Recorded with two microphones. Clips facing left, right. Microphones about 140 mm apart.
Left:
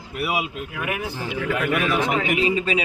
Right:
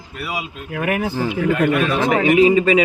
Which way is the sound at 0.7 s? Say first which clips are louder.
Right 7 dB; 55° right (ahead or behind).